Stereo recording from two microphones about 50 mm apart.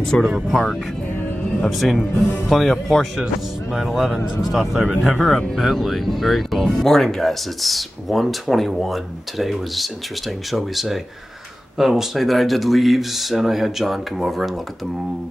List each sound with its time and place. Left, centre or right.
0.1 s speech: centre
1.7 s speech: centre